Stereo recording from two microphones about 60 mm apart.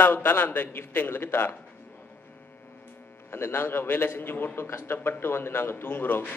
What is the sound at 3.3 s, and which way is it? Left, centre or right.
A man's voice, left.